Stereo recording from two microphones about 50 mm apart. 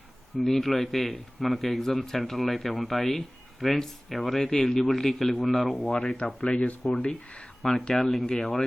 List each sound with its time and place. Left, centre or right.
0.4 s a man's voice: centre
5.9 s speech: centre
7.9 s a man's voice: centre